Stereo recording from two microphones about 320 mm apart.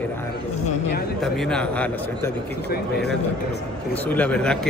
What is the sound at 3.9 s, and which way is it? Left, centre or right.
Speech, centre.